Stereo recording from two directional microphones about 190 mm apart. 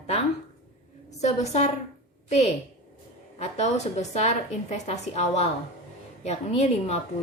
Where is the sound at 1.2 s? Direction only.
35° left (ahead or behind).